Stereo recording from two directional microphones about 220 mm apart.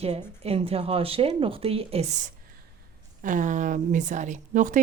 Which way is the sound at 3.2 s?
35° right (ahead or behind).